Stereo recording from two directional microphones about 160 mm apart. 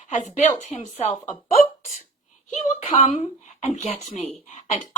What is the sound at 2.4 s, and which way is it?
A child's voice, 45° left (ahead or behind).